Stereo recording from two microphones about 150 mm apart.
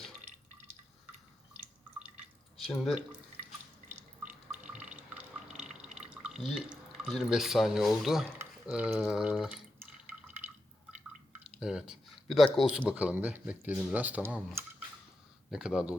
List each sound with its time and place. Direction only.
2.6 s speech: centre (ahead or behind)
3.8 s drip: 10° right (ahead or behind)
5.8 s speech: 5° right (ahead or behind)
11.6 s speech: 5° right (ahead or behind)